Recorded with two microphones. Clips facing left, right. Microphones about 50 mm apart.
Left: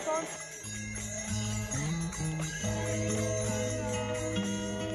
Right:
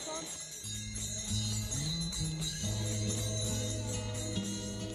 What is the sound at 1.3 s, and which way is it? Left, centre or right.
Music, left.